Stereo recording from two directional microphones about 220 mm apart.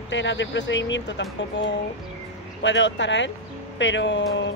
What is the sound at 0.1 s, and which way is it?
Speech, 55° left (ahead or behind).